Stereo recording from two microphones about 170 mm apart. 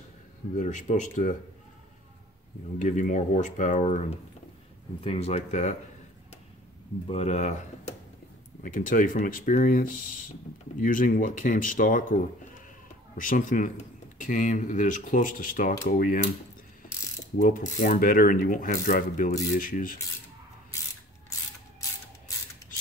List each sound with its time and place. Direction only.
0.6 s speech: 45° left (ahead or behind)
2.8 s speech: 45° left (ahead or behind)
7.1 s speech: 40° left (ahead or behind)
13.2 s speech: 50° left (ahead or behind)
17.4 s speech: 50° left (ahead or behind)